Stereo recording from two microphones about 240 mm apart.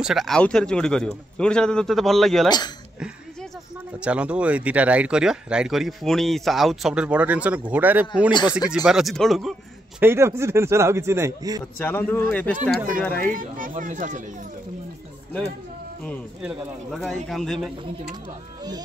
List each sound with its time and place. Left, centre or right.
0.0 s speech: centre
4.0 s a man's voice: centre
11.8 s speech: centre
13.3 s speech: right
16.4 s speech: centre